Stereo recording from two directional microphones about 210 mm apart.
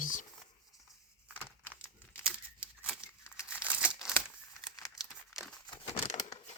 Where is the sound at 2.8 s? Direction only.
5° right (ahead or behind).